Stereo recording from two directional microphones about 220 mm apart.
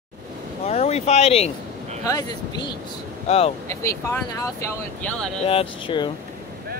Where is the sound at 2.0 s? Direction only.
15° left (ahead or behind).